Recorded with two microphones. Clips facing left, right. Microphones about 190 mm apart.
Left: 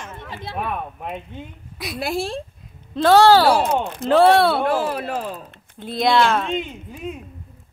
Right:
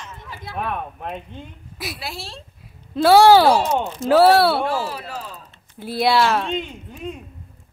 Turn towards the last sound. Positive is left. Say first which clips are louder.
# left 1 dB
turn(degrees=5)  # may be behind; listen again after turning